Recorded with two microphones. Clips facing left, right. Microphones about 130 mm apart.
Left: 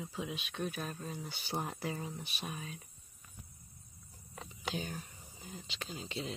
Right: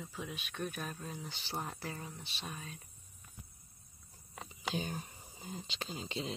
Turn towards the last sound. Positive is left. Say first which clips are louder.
# right 1 dB
turn(degrees=-25)  # may be behind; listen again after turning